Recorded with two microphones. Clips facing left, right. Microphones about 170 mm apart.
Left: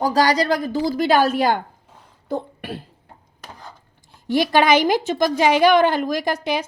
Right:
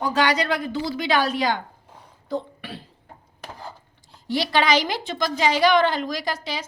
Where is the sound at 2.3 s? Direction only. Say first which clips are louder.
Left 3 dB; 50° left (ahead or behind).